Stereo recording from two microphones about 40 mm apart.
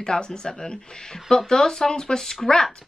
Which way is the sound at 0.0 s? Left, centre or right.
Centre.